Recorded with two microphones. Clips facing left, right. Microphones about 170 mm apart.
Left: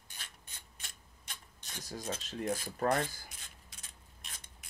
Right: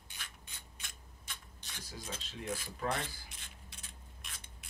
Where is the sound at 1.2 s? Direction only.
45° left (ahead or behind).